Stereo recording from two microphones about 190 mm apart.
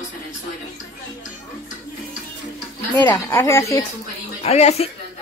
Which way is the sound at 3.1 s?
10° left (ahead or behind).